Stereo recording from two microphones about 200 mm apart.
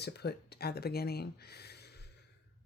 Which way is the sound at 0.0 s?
55° left (ahead or behind).